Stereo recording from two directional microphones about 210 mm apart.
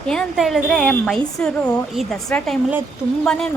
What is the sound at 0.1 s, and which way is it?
A woman's voice, centre (ahead or behind).